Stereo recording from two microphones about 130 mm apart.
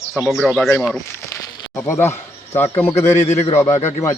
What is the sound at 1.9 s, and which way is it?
A man's voice, 20° left (ahead or behind).